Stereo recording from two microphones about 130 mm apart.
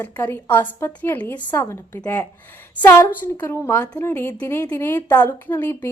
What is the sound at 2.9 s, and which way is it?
A woman's voice, 20° left (ahead or behind).